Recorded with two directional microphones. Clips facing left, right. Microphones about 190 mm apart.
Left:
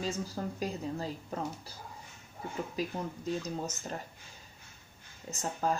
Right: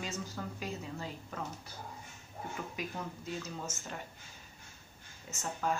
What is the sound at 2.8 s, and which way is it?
A woman's voice, 35° left (ahead or behind).